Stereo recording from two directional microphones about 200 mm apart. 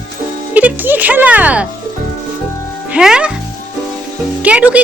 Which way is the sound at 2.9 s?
5° right (ahead or behind).